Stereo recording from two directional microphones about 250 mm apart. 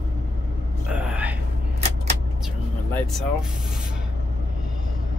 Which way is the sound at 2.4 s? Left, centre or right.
Centre.